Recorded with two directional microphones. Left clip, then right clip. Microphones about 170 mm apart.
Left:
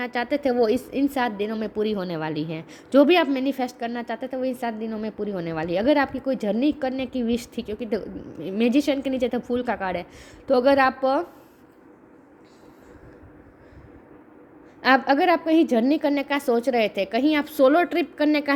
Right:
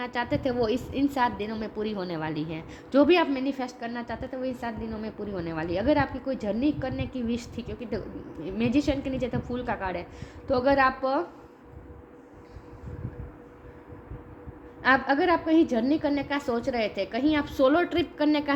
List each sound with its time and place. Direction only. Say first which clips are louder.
0.0 s a woman's voice: left 4 dB; 40° left (ahead or behind)
14.8 s a woman's voice: left 4 dB; 50° left (ahead or behind)